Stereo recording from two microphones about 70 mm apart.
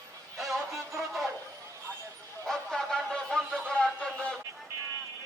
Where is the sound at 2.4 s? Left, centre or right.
Centre.